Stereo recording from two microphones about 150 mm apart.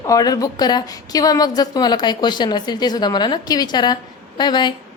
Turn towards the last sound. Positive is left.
turn(degrees=30)  # may be behind; listen again after turning